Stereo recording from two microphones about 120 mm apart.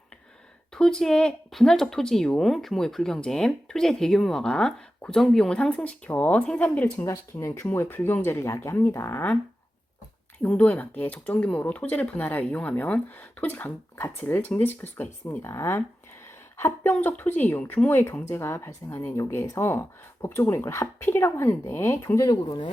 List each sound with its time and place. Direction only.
0.7 s speech: 5° left (ahead or behind)
7.0 s speech: 25° left (ahead or behind)
10.4 s speech: 10° left (ahead or behind); by 22.7 s 35° left (ahead or behind)